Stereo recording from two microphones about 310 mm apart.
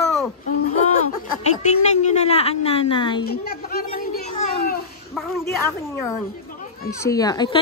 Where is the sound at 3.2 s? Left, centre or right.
Left.